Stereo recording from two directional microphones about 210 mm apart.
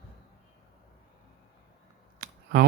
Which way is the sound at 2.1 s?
45° right (ahead or behind).